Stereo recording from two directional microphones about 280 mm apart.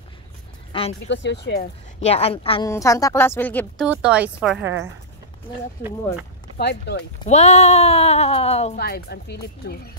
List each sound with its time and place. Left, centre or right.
0.9 s speech: left
2.0 s a woman's voice: left; by 4.6 s centre
6.6 s speech: left
7.2 s speech: left
8.7 s speech: left